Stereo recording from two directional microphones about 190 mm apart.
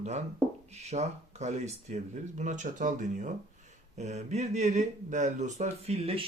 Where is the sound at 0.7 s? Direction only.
35° right (ahead or behind).